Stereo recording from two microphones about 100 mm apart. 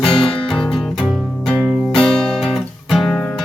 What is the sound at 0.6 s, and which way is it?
Music, centre (ahead or behind).